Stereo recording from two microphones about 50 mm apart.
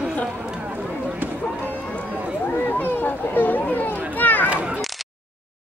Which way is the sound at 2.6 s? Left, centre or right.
Left.